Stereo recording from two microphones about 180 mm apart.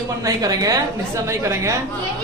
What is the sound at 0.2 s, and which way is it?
A man's voice, 20° right (ahead or behind).